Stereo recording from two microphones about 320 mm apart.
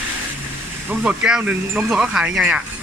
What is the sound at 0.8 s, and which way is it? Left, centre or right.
Speech, centre.